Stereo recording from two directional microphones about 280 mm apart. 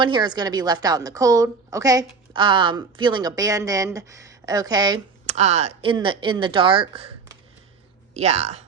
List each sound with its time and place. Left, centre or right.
0.0 s a woman's voice: centre